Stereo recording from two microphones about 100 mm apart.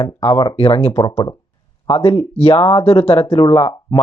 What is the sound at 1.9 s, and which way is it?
Speech, 75° left (ahead or behind).